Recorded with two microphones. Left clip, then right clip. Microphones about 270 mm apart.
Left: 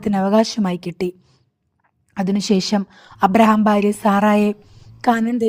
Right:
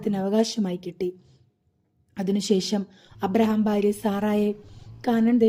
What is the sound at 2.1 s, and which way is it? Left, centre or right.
A woman's voice, left.